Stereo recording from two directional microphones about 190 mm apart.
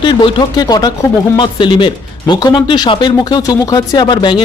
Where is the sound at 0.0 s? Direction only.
25° left (ahead or behind).